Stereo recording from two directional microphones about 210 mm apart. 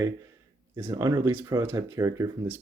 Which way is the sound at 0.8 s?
15° right (ahead or behind).